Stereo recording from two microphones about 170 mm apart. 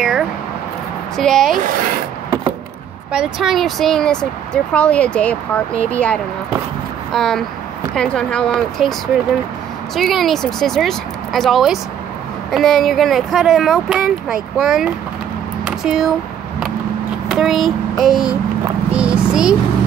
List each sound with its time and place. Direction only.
1.1 s speech: 5° left (ahead or behind)
1.6 s rub: 55° right (ahead or behind)
3.1 s speech: 5° right (ahead or behind)
15.6 s a sound: 5° right (ahead or behind)
17.3 s speech: centre (ahead or behind)